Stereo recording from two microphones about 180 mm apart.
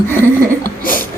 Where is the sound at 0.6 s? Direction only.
50° left (ahead or behind).